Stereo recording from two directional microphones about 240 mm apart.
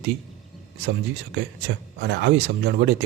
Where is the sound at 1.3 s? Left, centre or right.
Right.